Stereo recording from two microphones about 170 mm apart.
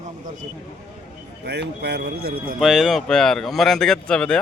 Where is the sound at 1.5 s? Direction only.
75° right (ahead or behind); by 2.6 s 60° right (ahead or behind).